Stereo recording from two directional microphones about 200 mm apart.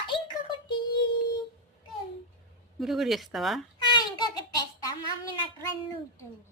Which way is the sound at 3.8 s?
20° left (ahead or behind).